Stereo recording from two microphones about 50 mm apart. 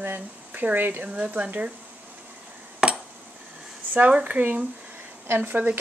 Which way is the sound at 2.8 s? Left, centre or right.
Centre.